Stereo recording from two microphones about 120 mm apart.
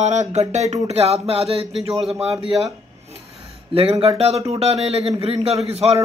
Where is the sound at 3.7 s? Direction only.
55° right (ahead or behind).